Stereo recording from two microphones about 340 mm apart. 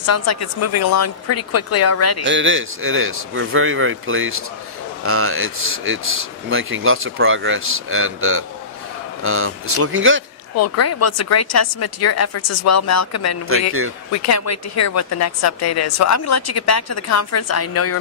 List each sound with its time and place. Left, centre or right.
0.0 s a woman's voice: left
2.2 s speech: right
10.5 s a woman's voice: left
13.5 s speech: right
14.1 s a woman's voice: left